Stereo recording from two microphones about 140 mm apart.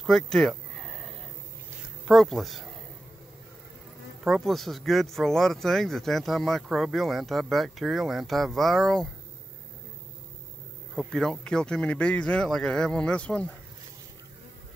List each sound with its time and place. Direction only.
0.0 s a sound: centre (ahead or behind)
2.0 s speech: centre (ahead or behind)
4.2 s speech: centre (ahead or behind)
11.0 s speech: 5° left (ahead or behind)